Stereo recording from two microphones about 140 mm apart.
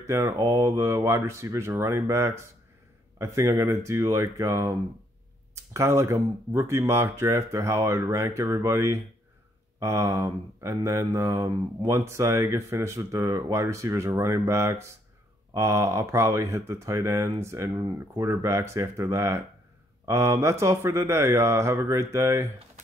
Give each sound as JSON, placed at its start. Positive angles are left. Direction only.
{"t": 0.0, "sound": "mantra", "side_deg": -20}